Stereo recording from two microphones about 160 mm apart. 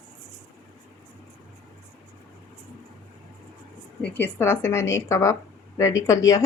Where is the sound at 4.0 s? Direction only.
15° left (ahead or behind).